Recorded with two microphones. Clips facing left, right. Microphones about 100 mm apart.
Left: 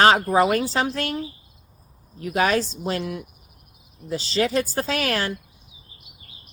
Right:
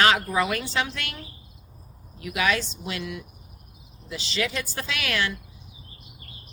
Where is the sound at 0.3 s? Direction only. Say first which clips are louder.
Left 7 dB; 35° left (ahead or behind).